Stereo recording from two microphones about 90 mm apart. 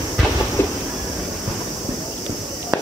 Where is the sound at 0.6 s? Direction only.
30° left (ahead or behind).